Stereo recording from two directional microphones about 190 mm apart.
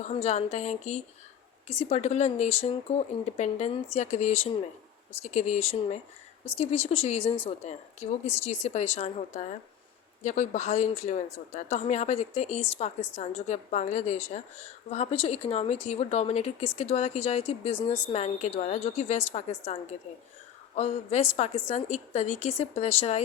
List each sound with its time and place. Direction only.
0.0 s a woman's voice: 35° left (ahead or behind)